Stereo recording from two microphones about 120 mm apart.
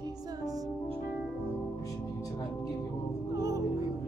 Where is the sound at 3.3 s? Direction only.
30° right (ahead or behind).